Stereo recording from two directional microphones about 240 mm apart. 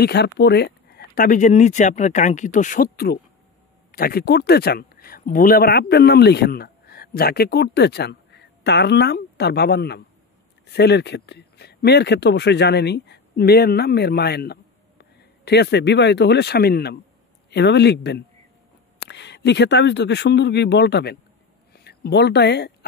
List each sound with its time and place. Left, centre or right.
0.0 s speech: left